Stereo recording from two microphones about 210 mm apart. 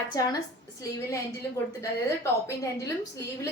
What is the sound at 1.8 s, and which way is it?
A woman's voice, 15° left (ahead or behind).